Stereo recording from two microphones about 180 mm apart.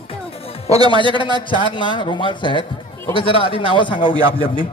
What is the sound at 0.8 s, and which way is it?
Speech, 25° right (ahead or behind).